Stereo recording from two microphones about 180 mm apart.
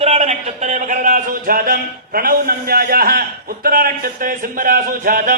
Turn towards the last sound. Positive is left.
turn(degrees=-50)  # may be behind; listen again after turning